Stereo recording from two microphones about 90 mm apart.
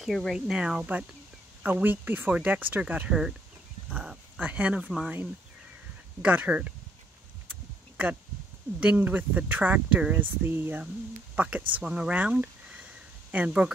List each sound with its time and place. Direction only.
0.0 s speech: centre (ahead or behind)
0.6 s speech: 10° right (ahead or behind)
3.1 s speech: 5° right (ahead or behind)
8.7 s speech: 15° right (ahead or behind)
11.7 s a sound: 10° right (ahead or behind)